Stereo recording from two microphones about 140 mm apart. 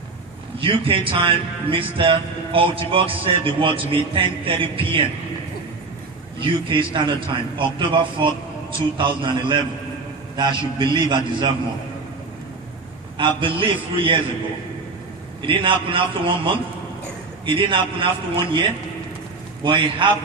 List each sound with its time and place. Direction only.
0.6 s a man's voice: 40° right (ahead or behind)
6.4 s a man's voice: 35° right (ahead or behind)
13.1 s a man's voice: 35° right (ahead or behind)
15.4 s a man's voice: 35° right (ahead or behind)
19.6 s a man's voice: 35° right (ahead or behind)